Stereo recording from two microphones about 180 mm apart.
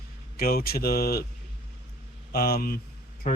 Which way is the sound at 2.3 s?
60° left (ahead or behind).